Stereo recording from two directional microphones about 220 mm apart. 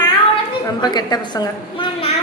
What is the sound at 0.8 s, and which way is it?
A woman's voice, 20° left (ahead or behind).